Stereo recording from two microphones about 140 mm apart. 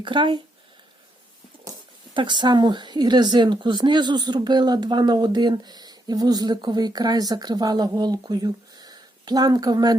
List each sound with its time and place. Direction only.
0.0 s speech: 35° right (ahead or behind)
2.1 s speech: 35° right (ahead or behind)